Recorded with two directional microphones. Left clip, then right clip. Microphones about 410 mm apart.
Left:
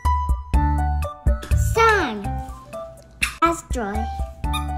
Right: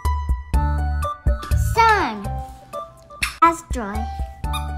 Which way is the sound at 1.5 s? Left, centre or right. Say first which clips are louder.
Right 1 dB; centre.